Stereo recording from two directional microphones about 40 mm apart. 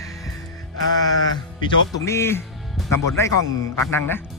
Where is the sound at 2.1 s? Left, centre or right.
Left.